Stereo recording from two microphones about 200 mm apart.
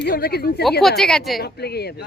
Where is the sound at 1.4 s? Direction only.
55° left (ahead or behind).